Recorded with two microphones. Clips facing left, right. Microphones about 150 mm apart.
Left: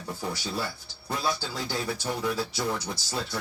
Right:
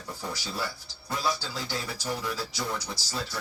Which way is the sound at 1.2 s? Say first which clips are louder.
Even; 25° left (ahead or behind).